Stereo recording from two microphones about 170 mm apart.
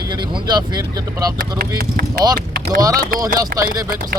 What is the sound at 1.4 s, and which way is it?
Speech, 60° right (ahead or behind).